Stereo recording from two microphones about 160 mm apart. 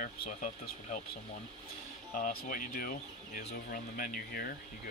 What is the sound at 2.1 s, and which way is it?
Speech, 60° left (ahead or behind).